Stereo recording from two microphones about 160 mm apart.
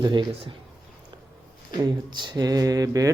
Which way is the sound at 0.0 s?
30° right (ahead or behind).